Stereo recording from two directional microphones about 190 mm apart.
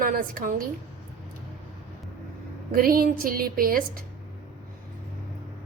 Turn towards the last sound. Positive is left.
turn(degrees=-50)  # may be behind; listen again after turning